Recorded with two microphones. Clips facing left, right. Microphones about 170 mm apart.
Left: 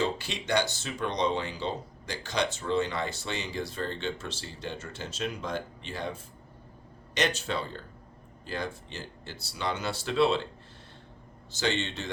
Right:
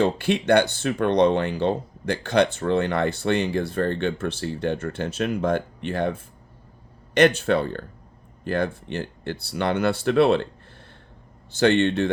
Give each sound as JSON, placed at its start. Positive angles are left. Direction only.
{"t": 0.0, "sound": "speech", "side_deg": -55}
{"t": 11.5, "sound": "speech", "side_deg": -55}